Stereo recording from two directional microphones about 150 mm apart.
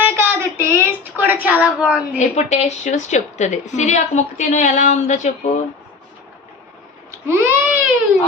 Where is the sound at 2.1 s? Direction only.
50° left (ahead or behind).